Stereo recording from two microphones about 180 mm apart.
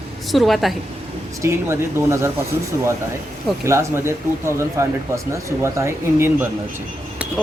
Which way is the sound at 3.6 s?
15° right (ahead or behind).